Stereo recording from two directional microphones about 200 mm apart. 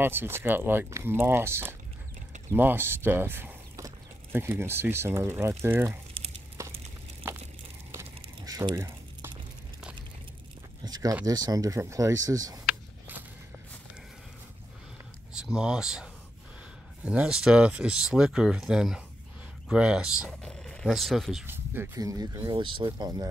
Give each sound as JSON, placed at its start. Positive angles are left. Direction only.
{"t": 0.0, "sound": "speech", "side_deg": -10}
{"t": 6.2, "sound": "a sound", "side_deg": -25}
{"t": 6.6, "sound": "a sound", "side_deg": -15}
{"t": 10.9, "sound": "speech", "side_deg": -15}
{"t": 15.3, "sound": "speech", "side_deg": -5}
{"t": 21.5, "sound": "speech", "side_deg": -10}